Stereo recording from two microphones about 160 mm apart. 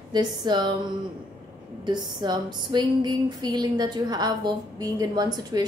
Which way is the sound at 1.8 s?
25° right (ahead or behind).